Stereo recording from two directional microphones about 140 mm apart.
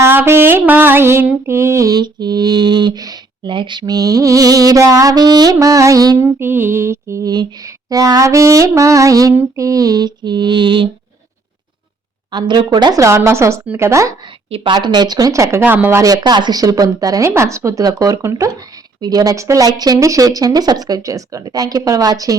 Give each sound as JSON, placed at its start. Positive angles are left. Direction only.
{"t": 0.0, "sound": "mantra", "side_deg": -15}
{"t": 6.2, "sound": "mantra", "side_deg": -15}
{"t": 9.3, "sound": "female singing", "side_deg": -20}
{"t": 12.3, "sound": "mantra", "side_deg": -30}
{"t": 14.5, "sound": "mantra", "side_deg": -35}